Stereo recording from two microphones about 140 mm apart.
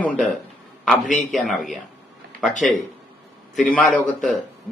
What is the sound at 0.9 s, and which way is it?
Speech, centre (ahead or behind).